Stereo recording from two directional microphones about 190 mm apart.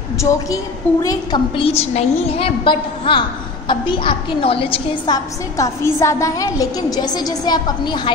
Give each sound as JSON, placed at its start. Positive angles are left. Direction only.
{"t": 0.2, "sound": "a woman's voice", "side_deg": 15}